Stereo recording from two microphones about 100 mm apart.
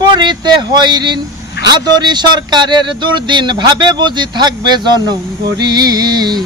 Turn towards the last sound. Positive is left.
turn(degrees=-45)  # may be behind; listen again after turning